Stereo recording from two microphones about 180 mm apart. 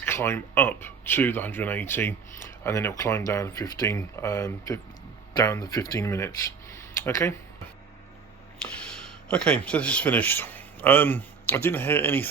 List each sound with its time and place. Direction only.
0.0 s speech: 15° left (ahead or behind)
6.7 s a sound: 15° left (ahead or behind)
8.6 s speech: 5° left (ahead or behind)